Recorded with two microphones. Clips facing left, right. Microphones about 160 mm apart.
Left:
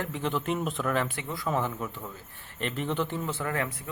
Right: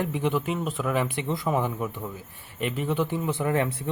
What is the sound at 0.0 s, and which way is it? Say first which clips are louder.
A man's voice: right 4 dB; 15° right (ahead or behind).